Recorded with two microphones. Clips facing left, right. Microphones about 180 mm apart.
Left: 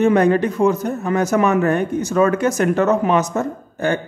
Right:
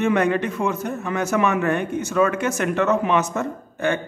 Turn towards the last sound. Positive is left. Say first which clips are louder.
# left 3 dB
turn(degrees=35)  # may be behind; listen again after turning